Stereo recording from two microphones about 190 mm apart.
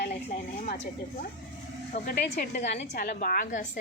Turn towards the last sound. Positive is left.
turn(degrees=45)  # may be behind; listen again after turning